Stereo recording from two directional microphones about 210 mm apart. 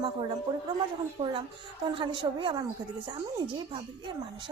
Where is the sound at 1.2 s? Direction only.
30° right (ahead or behind).